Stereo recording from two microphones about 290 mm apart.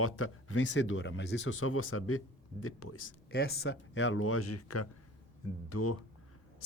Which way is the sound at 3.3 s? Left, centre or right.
Left.